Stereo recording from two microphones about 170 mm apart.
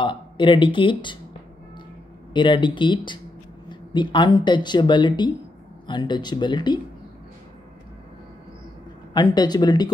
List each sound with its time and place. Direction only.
0.0 s speech: 30° left (ahead or behind)
2.3 s speech: 30° left (ahead or behind)
9.1 s speech: 25° left (ahead or behind)